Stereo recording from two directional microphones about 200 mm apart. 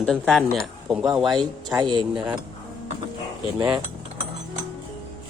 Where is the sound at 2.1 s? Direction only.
5° right (ahead or behind).